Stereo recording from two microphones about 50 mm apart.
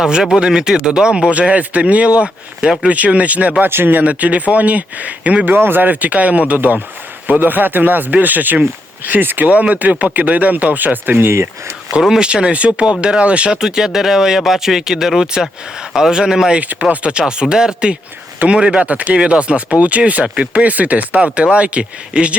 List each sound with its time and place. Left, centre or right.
0.3 s speech: centre
3.6 s speech: right
3.9 s speech: right
5.5 s speech: right
9.5 s speech: right
12.2 s speech: centre
16.9 s speech: right